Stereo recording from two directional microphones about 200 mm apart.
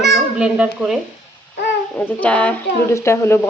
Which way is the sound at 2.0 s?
5° left (ahead or behind).